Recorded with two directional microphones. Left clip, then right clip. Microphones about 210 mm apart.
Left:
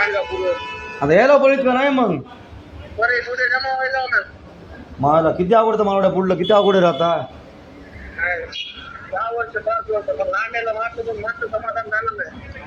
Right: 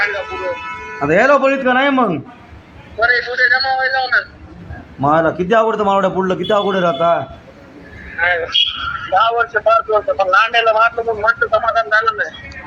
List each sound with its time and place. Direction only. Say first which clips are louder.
0.0 s a sound: right 1 dB; 10° left (ahead or behind)
0.9 s a man's voice: right 1 dB; 10° left (ahead or behind)
8.2 s a man's voice: right 9 dB; 20° right (ahead or behind)
11.9 s speech: right 8 dB; 10° right (ahead or behind)